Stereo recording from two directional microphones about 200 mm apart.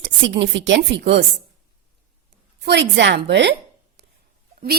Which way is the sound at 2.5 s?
60° right (ahead or behind).